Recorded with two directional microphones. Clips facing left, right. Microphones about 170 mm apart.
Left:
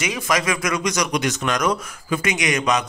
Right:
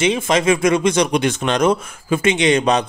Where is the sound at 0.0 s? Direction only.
25° right (ahead or behind).